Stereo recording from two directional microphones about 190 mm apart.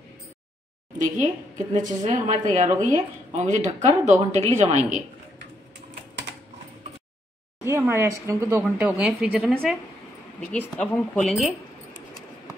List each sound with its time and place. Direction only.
0.9 s a woman's voice: 40° right (ahead or behind)
7.6 s speech: 15° right (ahead or behind)